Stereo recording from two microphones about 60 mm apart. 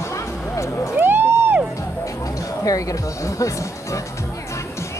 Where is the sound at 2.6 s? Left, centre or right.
Left.